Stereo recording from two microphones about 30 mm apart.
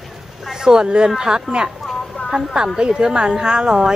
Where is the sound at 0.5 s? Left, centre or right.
Right.